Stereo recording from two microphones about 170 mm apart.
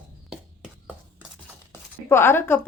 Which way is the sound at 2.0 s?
15° left (ahead or behind).